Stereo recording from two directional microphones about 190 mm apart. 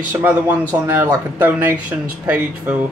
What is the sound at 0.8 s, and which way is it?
Speech, 10° right (ahead or behind).